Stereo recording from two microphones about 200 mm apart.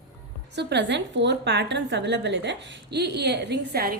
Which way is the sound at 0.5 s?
60° right (ahead or behind).